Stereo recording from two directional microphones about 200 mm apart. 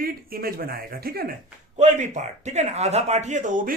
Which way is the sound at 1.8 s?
35° right (ahead or behind).